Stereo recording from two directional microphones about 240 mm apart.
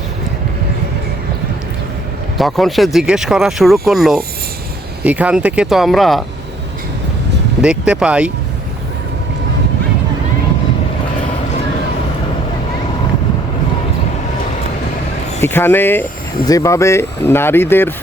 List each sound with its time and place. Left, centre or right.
2.4 s speech: centre
7.6 s speech: centre
15.4 s speech: centre